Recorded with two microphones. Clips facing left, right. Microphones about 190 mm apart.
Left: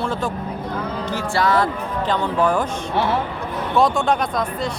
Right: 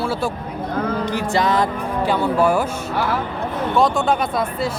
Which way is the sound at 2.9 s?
25° left (ahead or behind).